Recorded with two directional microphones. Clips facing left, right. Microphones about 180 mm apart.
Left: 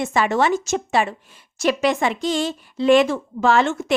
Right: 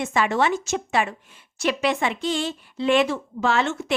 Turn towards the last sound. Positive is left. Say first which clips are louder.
# left 5 dB
turn(degrees=45)  # may be behind; listen again after turning